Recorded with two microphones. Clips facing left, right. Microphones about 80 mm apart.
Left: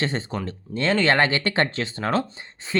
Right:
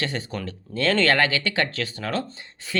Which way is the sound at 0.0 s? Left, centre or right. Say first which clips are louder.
Left 2 dB; left.